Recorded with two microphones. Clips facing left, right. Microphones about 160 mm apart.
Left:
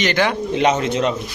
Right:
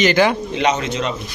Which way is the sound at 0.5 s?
50° left (ahead or behind).